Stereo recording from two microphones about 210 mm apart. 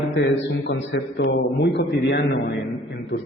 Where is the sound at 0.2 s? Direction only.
55° left (ahead or behind).